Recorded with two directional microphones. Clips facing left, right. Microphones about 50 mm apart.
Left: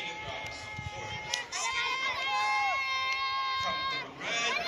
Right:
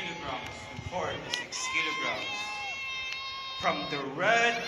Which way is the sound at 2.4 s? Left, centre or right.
Left.